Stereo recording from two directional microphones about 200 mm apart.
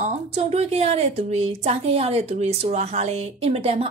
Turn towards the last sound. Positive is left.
turn(degrees=-30)  # may be behind; listen again after turning